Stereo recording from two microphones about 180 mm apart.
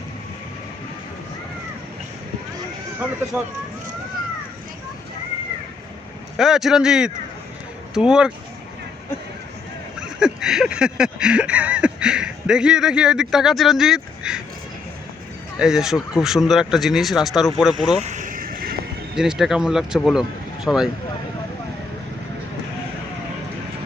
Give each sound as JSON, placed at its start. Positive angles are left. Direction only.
{"t": 3.3, "sound": "speech", "side_deg": -10}
{"t": 6.3, "sound": "speech", "side_deg": 0}
{"t": 10.0, "sound": "a sound", "side_deg": -5}
{"t": 15.5, "sound": "speech", "side_deg": -5}
{"t": 18.0, "sound": "vehicle", "side_deg": -45}
{"t": 19.1, "sound": "speech", "side_deg": -5}